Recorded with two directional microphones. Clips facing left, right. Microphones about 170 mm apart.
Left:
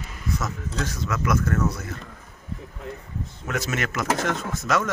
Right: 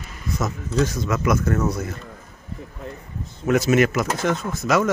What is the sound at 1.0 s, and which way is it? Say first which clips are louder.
Speech: right 4 dB; 20° right (ahead or behind).